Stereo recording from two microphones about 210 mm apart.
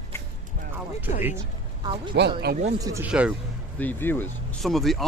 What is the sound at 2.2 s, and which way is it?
Speech, 50° right (ahead or behind).